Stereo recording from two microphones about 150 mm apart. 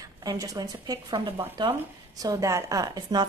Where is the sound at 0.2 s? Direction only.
25° right (ahead or behind).